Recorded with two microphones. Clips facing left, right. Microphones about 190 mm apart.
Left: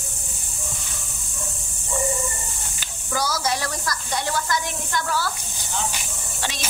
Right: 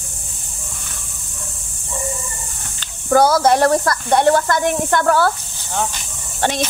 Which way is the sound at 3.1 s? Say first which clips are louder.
Right 12 dB; 55° right (ahead or behind).